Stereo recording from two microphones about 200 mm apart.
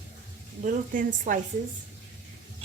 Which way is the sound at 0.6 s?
40° right (ahead or behind).